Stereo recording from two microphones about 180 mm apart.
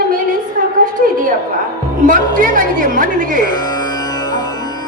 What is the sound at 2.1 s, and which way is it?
A woman's voice, 50° right (ahead or behind).